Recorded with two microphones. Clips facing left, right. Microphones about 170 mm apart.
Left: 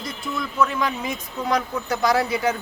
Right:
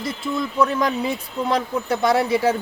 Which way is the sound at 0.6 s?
35° right (ahead or behind).